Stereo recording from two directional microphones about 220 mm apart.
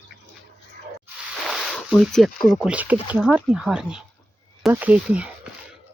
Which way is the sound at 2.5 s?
5° right (ahead or behind).